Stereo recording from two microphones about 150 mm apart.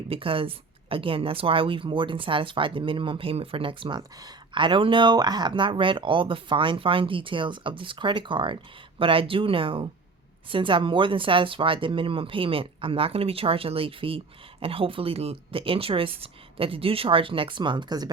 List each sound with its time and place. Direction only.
0.1 s a woman's voice: 35° right (ahead or behind)